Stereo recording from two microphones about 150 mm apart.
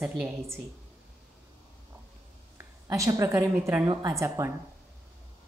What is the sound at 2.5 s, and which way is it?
A woman's voice, 20° right (ahead or behind).